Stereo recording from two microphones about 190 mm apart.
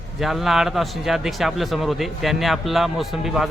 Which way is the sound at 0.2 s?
Centre (ahead or behind).